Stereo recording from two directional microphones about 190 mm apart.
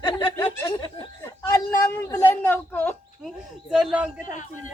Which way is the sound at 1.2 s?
10° left (ahead or behind).